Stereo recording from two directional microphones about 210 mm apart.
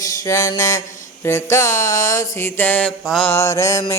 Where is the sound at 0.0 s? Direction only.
15° left (ahead or behind).